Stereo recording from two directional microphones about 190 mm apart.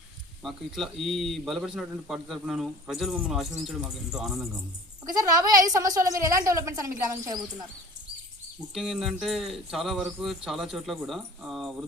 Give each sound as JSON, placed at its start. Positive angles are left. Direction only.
{"t": 0.4, "sound": "speech", "side_deg": 0}
{"t": 5.1, "sound": "a woman's voice", "side_deg": -20}
{"t": 8.7, "sound": "speech", "side_deg": 0}